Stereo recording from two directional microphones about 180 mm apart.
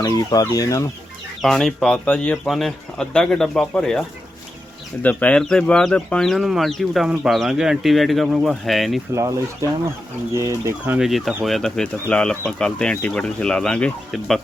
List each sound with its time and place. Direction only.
0.0 s chicken: 20° left (ahead or behind)
1.4 s speech: centre (ahead or behind)
5.0 s speech: 5° left (ahead or behind)
10.3 s speech: 15° right (ahead or behind); by 14.4 s centre (ahead or behind)